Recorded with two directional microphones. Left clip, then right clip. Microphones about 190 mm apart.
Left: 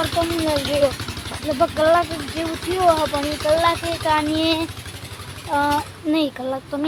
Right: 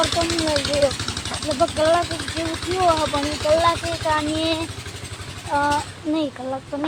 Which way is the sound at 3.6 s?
15° left (ahead or behind).